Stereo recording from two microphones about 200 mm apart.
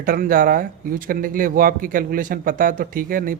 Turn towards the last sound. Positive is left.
turn(degrees=-45)  # may be behind; listen again after turning